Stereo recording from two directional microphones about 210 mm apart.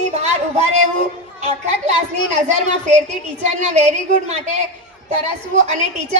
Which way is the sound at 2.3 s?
35° right (ahead or behind).